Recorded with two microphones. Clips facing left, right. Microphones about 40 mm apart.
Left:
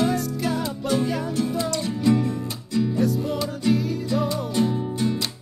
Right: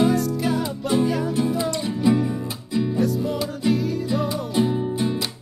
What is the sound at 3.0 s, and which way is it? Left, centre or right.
Music, centre.